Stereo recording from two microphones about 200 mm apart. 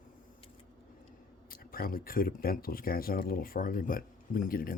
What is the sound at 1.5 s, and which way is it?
Speech, 45° left (ahead or behind).